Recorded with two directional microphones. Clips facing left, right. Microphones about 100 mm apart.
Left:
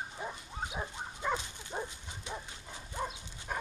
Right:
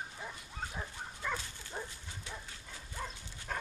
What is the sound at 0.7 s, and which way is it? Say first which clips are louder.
Dog: left 4 dB; 20° left (ahead or behind).